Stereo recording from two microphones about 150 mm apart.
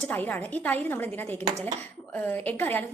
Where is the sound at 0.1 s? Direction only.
10° left (ahead or behind).